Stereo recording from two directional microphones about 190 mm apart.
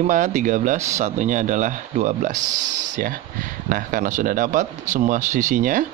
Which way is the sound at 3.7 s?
45° right (ahead or behind).